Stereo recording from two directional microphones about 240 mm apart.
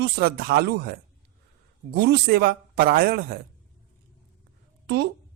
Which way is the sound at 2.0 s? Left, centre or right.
Right.